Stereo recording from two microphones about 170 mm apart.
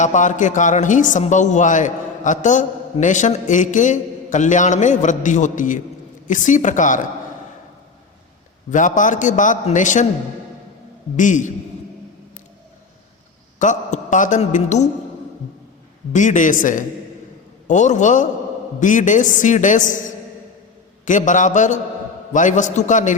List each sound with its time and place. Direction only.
0.0 s a woman's voice: 45° left (ahead or behind)
8.7 s a woman's voice: 50° left (ahead or behind)
11.2 s a woman's voice: 50° left (ahead or behind)
13.6 s speech: 45° left (ahead or behind)
16.1 s a woman's voice: 45° left (ahead or behind)
21.0 s a woman's voice: 50° left (ahead or behind)